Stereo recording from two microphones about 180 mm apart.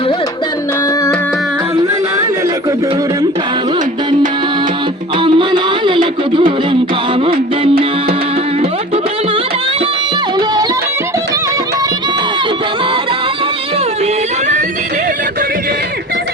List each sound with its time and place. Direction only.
5.2 s music: 25° right (ahead or behind)
10.3 s music: 20° right (ahead or behind)